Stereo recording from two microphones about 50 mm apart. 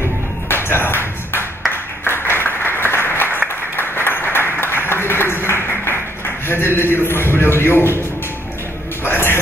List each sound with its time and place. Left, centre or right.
0.5 s music: left
1.7 s applause: left
6.4 s a man's voice: left
9.0 s music: left